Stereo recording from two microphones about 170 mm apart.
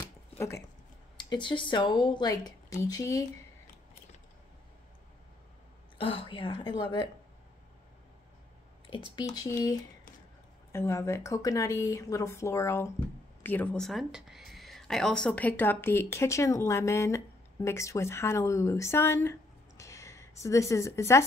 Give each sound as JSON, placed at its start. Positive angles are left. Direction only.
{"t": 0.4, "sound": "speech", "side_deg": 15}
{"t": 1.1, "sound": "speech", "side_deg": 25}
{"t": 5.9, "sound": "speech", "side_deg": 35}
{"t": 8.9, "sound": "speech", "side_deg": 30}
{"t": 9.3, "sound": "speech", "side_deg": 20}
{"t": 19.8, "sound": "a sound", "side_deg": 15}